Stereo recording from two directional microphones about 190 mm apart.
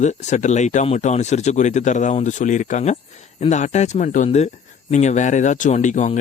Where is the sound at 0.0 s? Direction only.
40° left (ahead or behind).